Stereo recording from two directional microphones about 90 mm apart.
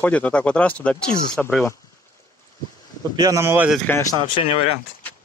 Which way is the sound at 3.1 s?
45° right (ahead or behind).